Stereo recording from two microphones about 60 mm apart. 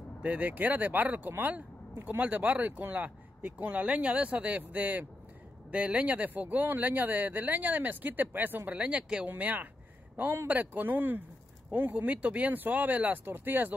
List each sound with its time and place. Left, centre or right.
0.2 s a man's voice: right
12.1 s speech: right